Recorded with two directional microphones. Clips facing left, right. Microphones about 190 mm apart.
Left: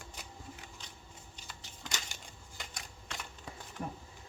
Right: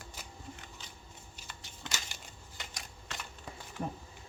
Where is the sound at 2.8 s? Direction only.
Centre (ahead or behind).